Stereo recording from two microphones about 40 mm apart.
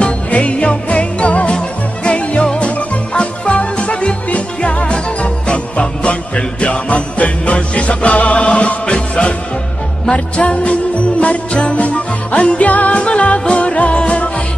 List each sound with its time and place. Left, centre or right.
0.3 s jingle bell: left
2.0 s music: left
10.0 s jingle bell: left
13.0 s music: left